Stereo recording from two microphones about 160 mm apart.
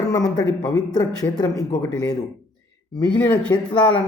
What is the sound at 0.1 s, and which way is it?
Speech, 25° left (ahead or behind).